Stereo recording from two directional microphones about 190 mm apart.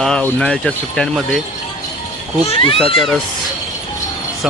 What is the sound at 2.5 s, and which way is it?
Speech, 25° left (ahead or behind).